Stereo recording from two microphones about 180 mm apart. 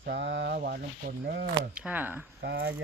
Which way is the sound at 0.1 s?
80° right.